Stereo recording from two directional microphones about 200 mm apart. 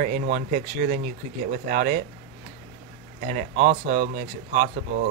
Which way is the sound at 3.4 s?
40° right (ahead or behind).